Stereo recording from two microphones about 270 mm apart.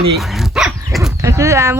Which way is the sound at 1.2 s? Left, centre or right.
Centre.